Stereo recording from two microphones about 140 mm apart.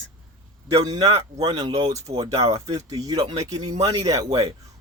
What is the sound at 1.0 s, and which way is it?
Speech, 45° right (ahead or behind).